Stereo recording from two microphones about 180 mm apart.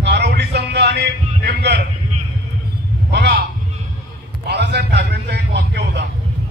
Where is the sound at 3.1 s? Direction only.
65° right (ahead or behind).